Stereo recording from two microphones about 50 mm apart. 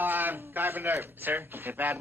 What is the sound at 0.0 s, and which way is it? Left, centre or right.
A man's voice, right.